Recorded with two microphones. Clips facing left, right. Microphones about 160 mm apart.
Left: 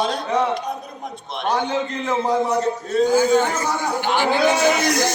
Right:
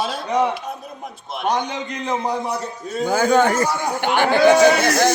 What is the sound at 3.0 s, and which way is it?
A man's voice, 55° right (ahead or behind).